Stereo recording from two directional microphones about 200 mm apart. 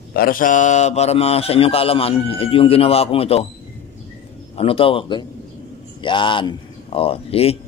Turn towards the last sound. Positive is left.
turn(degrees=30)  # may be behind; listen again after turning